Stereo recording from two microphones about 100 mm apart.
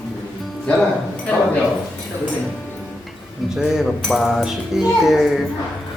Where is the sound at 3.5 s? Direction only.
5° right (ahead or behind).